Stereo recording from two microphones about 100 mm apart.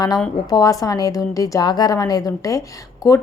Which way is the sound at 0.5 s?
35° left (ahead or behind).